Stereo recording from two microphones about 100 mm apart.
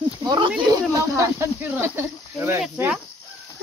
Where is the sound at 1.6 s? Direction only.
20° right (ahead or behind).